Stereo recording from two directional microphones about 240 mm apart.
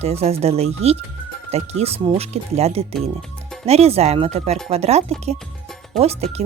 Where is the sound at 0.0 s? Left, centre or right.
Right.